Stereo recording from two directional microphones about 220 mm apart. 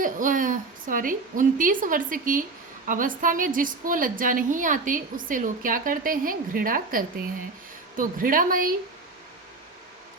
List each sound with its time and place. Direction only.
0.0 s a woman's voice: 35° right (ahead or behind)